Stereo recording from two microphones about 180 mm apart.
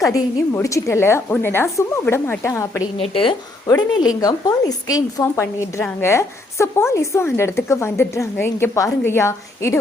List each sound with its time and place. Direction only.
0.0 s speech: 20° left (ahead or behind)
3.0 s a woman's voice: 30° left (ahead or behind); by 9.7 s 15° left (ahead or behind)